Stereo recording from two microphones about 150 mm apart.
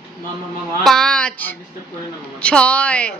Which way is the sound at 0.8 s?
Centre (ahead or behind).